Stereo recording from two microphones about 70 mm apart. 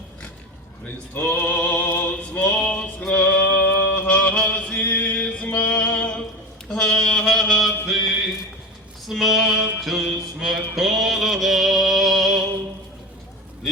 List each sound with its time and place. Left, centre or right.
1.1 s a sound: left
1.5 s music: left
4.0 s mantra: centre
4.8 s music: left
5.5 s music: left
5.7 s music: centre
6.7 s mantra: centre
9.0 s a sound: centre
11.0 s music: centre